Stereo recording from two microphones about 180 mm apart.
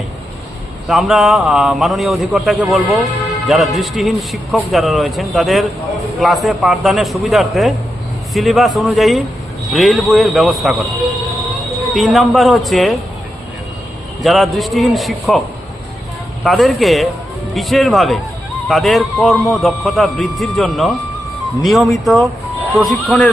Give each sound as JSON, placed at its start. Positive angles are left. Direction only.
{"t": 0.9, "sound": "a man's voice", "side_deg": 0}
{"t": 11.9, "sound": "a man's voice", "side_deg": 0}
{"t": 14.2, "sound": "a man's voice", "side_deg": 0}
{"t": 16.4, "sound": "a man's voice", "side_deg": 0}